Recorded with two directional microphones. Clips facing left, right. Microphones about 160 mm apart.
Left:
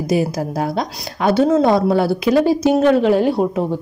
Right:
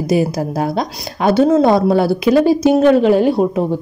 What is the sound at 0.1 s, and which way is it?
A woman's voice, 25° right (ahead or behind).